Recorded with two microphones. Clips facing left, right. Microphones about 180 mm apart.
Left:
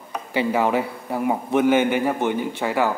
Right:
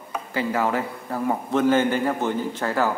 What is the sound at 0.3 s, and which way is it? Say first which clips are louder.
A man's voice: left 3 dB; 20° left (ahead or behind).